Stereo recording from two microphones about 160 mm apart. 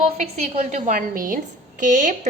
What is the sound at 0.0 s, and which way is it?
A woman's voice, 45° right (ahead or behind).